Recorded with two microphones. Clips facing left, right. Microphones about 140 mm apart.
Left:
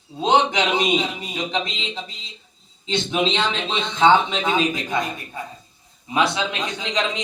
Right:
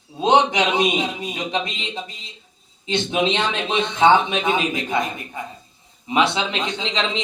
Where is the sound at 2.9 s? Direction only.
20° right (ahead or behind).